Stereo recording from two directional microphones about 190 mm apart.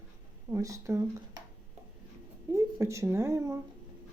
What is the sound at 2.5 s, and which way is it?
Speech, 15° right (ahead or behind).